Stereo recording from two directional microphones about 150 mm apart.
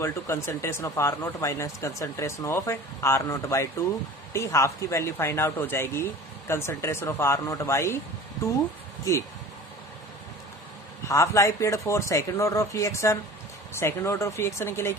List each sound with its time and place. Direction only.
0.0 s speech: 15° left (ahead or behind)
11.1 s speech: 20° left (ahead or behind)